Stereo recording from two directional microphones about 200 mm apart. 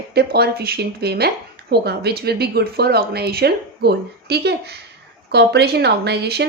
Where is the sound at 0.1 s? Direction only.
50° right (ahead or behind).